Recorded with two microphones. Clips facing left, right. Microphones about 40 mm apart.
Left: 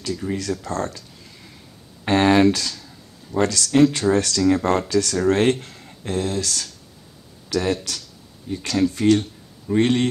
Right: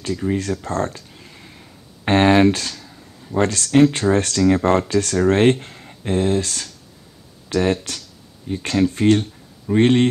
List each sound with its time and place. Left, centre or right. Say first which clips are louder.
0.2 s speech: right 3 dB; right